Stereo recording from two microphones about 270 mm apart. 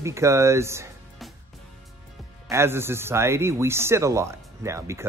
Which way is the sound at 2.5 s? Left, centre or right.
Centre.